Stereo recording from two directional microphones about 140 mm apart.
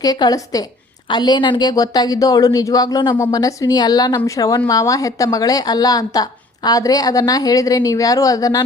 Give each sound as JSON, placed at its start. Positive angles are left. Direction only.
{"t": 0.0, "sound": "a woman's voice", "side_deg": 25}